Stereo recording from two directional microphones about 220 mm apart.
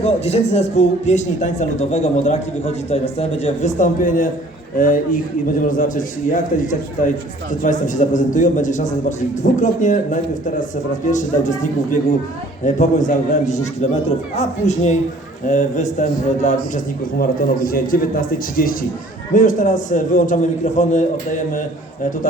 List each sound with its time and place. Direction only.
0.0 s a man's voice: 30° left (ahead or behind)